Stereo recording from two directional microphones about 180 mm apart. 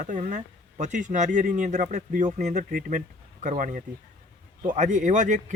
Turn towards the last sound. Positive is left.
turn(degrees=-45)  # may be behind; listen again after turning